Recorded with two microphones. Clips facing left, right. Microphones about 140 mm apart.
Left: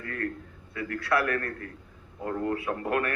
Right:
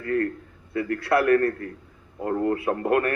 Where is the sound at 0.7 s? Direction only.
35° right (ahead or behind).